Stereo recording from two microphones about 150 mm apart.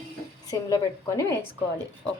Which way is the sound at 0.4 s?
20° left (ahead or behind).